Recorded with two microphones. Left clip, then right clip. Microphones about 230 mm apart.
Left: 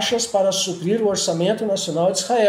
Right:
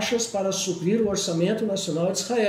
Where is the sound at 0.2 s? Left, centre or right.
Left.